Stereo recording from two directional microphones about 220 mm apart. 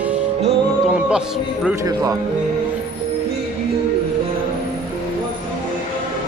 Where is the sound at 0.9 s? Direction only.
5° right (ahead or behind).